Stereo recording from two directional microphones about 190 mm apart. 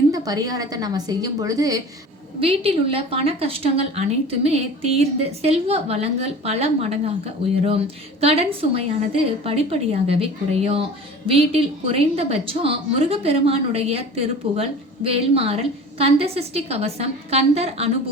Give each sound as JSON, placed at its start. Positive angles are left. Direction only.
{"t": 0.3, "sound": "a woman's voice", "side_deg": -20}
{"t": 2.4, "sound": "a woman's voice", "side_deg": -30}
{"t": 8.2, "sound": "a woman's voice", "side_deg": -30}